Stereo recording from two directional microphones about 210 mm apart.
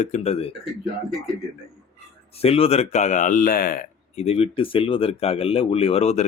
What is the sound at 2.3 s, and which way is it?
Speech, 30° left (ahead or behind).